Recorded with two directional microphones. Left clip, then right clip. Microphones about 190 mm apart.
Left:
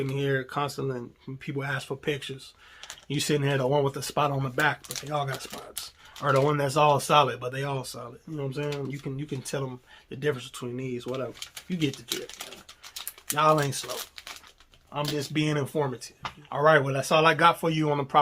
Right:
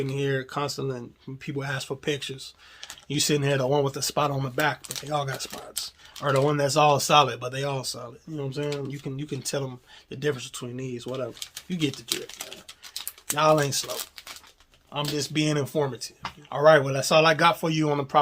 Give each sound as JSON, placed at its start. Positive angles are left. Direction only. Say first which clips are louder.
{"t": 0.0, "sound": "speech", "louder": "right 1 dB", "side_deg": -20}
{"t": 11.9, "sound": "speech", "louder": "right 2 dB", "side_deg": 0}
{"t": 13.3, "sound": "speech", "louder": "right 2 dB", "side_deg": -25}
{"t": 15.1, "sound": "speech", "louder": "right 3 dB", "side_deg": -25}